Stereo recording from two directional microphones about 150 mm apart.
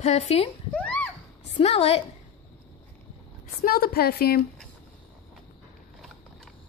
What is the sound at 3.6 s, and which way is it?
Speech, 85° left.